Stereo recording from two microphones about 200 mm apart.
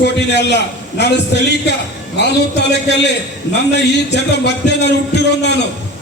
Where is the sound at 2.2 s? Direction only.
60° left (ahead or behind).